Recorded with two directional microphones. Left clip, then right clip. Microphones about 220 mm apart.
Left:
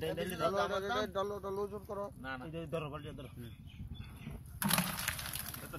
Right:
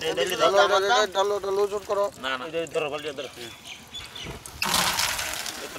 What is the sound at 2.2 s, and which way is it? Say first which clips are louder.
Speech: right 14 dB; 50° right (ahead or behind).